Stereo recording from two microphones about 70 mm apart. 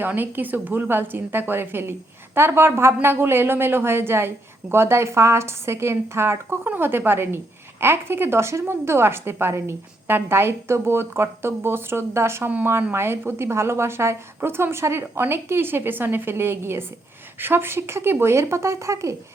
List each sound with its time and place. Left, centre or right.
0.0 s a woman's voice: right